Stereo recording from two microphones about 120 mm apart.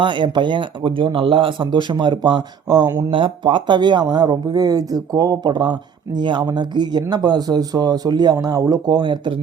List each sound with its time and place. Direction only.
0.0 s speech: 40° right (ahead or behind)